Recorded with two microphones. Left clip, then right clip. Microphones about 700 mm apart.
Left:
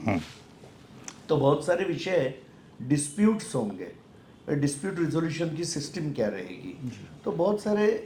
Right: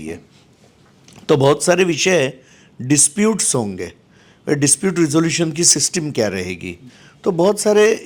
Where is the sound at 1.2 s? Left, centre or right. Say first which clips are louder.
Right 10 dB; right.